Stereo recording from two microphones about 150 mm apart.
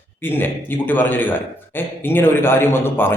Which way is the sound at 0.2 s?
15° left (ahead or behind).